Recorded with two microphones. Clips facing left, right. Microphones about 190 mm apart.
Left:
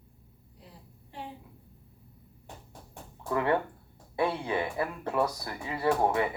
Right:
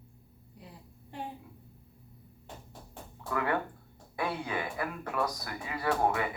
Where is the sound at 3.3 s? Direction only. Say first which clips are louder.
Left 4 dB; 25° left (ahead or behind).